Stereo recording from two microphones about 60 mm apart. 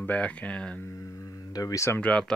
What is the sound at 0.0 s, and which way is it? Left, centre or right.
Speech, left.